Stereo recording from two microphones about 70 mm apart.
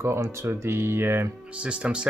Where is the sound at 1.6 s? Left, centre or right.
Centre.